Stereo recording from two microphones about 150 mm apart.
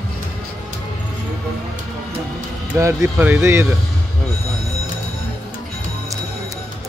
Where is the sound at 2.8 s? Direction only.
20° right (ahead or behind).